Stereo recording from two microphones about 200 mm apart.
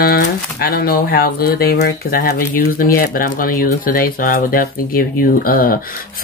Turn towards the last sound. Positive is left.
turn(degrees=45)  # may be behind; listen again after turning